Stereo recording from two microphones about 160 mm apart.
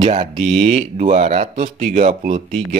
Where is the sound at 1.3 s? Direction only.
35° right (ahead or behind).